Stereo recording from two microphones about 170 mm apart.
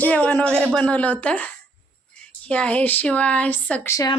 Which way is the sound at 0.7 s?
5° left (ahead or behind).